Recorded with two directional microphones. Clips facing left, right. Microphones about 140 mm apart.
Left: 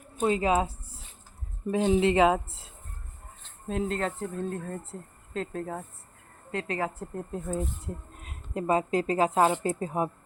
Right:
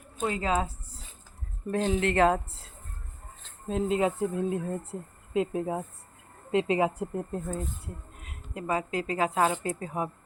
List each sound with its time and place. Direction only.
0.2 s a woman's voice: 20° left (ahead or behind)
1.9 s speech: 15° left (ahead or behind)
3.7 s speech: 5° right (ahead or behind)
8.2 s music: 35° left (ahead or behind)
8.9 s speech: 40° left (ahead or behind)
9.1 s a woman's voice: 25° left (ahead or behind)